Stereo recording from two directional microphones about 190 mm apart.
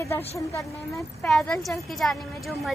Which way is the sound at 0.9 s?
Centre (ahead or behind).